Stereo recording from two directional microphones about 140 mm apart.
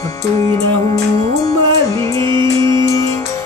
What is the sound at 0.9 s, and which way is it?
Music, 25° left (ahead or behind).